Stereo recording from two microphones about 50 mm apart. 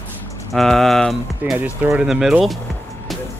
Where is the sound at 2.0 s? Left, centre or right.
Centre.